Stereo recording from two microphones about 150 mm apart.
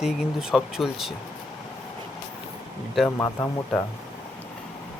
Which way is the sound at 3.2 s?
15° left (ahead or behind).